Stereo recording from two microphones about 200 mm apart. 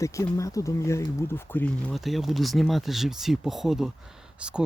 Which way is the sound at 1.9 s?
Centre (ahead or behind).